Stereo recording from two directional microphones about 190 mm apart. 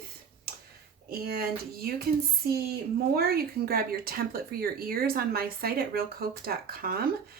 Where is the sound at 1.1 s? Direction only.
55° right (ahead or behind).